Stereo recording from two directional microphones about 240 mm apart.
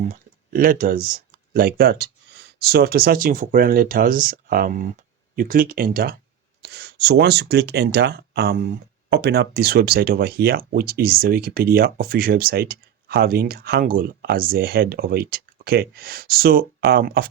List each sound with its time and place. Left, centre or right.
0.0 s speech: right